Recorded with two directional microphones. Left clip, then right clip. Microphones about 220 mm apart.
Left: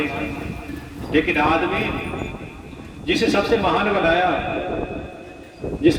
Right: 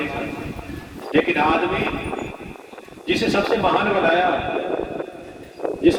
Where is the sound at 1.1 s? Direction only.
50° left (ahead or behind).